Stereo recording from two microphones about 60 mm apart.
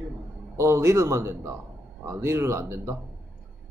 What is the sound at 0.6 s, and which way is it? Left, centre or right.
Speech, right.